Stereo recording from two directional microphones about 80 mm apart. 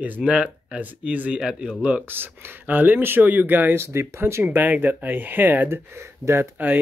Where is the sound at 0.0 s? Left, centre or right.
Centre.